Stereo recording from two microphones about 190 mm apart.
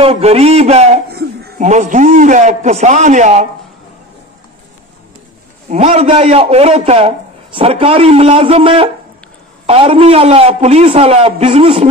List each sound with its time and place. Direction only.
0.0 s a man's voice: 30° right (ahead or behind)
1.0 s a sound: 55° right (ahead or behind)
1.6 s a man's voice: 40° right (ahead or behind)
5.7 s a man's voice: 35° right (ahead or behind)